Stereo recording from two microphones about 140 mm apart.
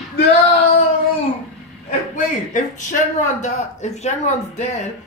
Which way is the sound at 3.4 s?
55° left (ahead or behind).